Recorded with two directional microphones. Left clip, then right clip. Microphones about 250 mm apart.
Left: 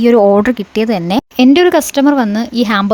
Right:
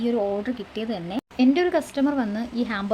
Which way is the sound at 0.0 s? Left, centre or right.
Left.